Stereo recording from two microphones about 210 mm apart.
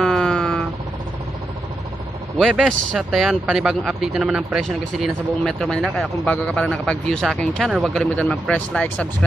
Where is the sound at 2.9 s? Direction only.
Centre (ahead or behind).